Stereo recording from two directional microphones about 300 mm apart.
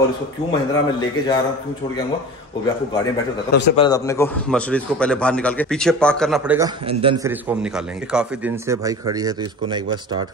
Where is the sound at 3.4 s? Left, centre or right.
Left.